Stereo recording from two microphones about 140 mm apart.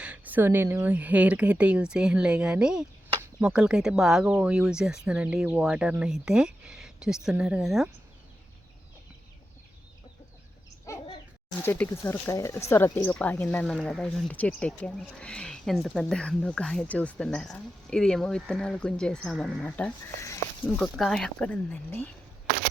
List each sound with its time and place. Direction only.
0.0 s speech: 10° right (ahead or behind)
10.9 s bird: 25° left (ahead or behind)
11.6 s speech: 15° left (ahead or behind)